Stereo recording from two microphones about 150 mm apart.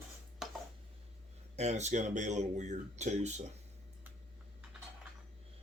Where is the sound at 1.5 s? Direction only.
50° right (ahead or behind).